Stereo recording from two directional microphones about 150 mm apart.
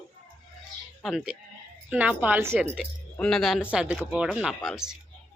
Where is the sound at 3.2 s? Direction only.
5° left (ahead or behind).